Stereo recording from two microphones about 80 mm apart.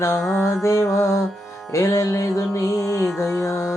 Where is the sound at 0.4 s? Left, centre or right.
Left.